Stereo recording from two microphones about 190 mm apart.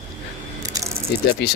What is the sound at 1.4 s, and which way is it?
Speech, 60° left (ahead or behind).